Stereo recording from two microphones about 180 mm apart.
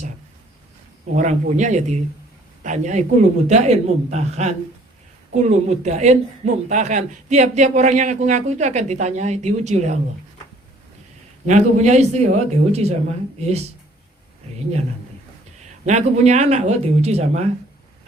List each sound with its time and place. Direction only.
1.1 s a man's voice: 45° right (ahead or behind)
11.4 s a man's voice: 40° right (ahead or behind)
15.9 s a man's voice: 40° right (ahead or behind)